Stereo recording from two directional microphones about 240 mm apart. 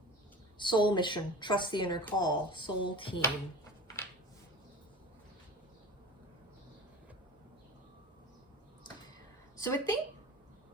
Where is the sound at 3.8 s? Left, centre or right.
Centre.